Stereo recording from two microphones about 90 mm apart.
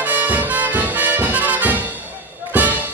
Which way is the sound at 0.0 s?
20° right (ahead or behind).